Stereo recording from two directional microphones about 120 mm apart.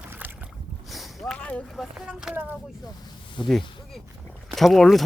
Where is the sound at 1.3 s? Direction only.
10° left (ahead or behind).